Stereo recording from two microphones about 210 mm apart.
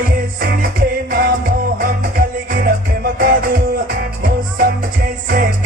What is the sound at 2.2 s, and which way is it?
Music, 40° right (ahead or behind).